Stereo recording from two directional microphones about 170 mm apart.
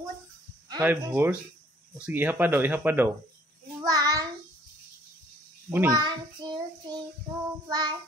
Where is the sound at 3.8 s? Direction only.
20° right (ahead or behind).